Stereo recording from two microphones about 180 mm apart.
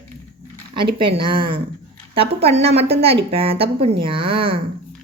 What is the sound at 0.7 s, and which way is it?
A woman's voice, 25° right (ahead or behind).